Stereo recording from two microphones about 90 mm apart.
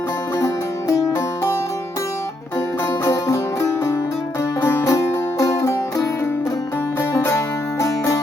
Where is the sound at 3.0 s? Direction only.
35° left (ahead or behind).